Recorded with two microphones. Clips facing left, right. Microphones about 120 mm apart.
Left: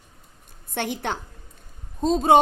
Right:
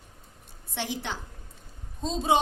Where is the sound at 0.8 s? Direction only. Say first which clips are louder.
Left 6 dB; 55° left (ahead or behind).